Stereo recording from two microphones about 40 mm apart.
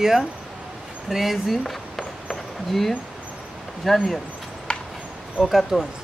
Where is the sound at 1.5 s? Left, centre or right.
Centre.